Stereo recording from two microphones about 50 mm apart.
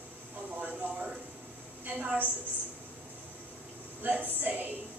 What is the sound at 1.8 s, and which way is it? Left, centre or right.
Speech, right.